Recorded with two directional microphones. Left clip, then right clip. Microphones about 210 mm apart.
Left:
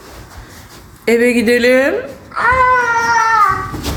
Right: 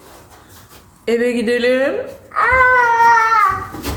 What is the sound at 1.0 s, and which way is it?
Speech, 20° left (ahead or behind).